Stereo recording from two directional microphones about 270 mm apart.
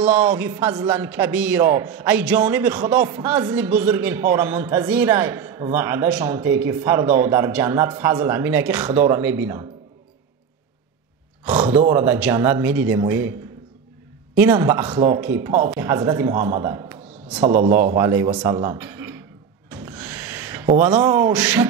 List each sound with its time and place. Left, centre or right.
0.0 s a man's voice: centre
11.4 s a man's voice: centre
19.7 s gasp: centre
20.8 s a man's voice: centre